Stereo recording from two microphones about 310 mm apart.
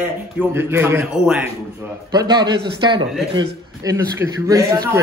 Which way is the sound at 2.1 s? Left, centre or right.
Centre.